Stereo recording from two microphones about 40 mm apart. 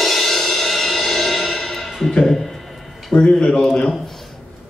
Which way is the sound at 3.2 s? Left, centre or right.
Left.